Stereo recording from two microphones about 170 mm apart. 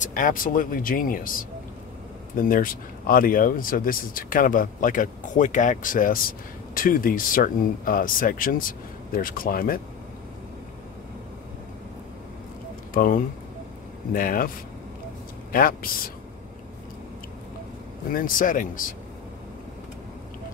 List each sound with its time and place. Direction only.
0.0 s speech: 50° left (ahead or behind)
2.3 s speech: 55° left (ahead or behind)
12.9 s speech: 55° left (ahead or behind)
15.5 s speech: 60° left (ahead or behind)
18.1 s speech: 55° left (ahead or behind)